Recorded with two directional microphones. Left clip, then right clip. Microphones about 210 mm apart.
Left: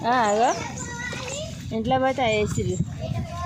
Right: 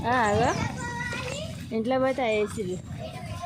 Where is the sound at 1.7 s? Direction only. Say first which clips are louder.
Left 3 dB; 10° left (ahead or behind).